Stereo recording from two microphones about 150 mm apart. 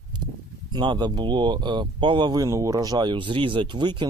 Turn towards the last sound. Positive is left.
turn(degrees=-30)  # may be behind; listen again after turning